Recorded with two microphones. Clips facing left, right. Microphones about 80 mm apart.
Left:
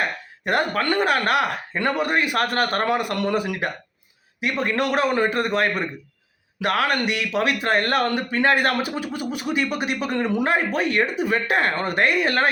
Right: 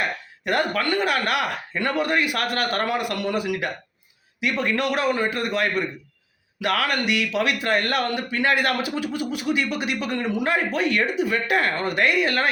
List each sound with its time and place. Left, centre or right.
0.4 s speech: left